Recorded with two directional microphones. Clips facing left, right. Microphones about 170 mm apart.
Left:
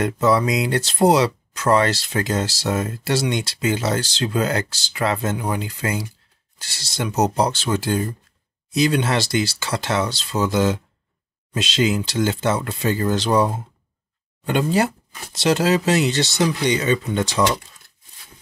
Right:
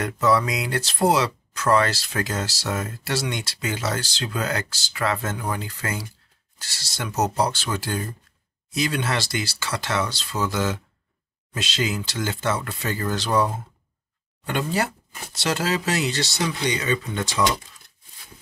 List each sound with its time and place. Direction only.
0.0 s speech: 25° left (ahead or behind)